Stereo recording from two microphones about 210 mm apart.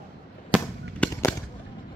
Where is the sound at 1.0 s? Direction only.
5° left (ahead or behind).